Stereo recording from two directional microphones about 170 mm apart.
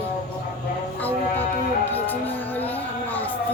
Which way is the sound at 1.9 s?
10° left (ahead or behind).